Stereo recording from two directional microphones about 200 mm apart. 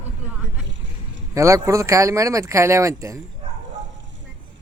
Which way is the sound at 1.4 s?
15° right (ahead or behind).